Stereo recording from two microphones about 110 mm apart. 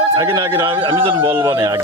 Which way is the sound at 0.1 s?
45° right (ahead or behind).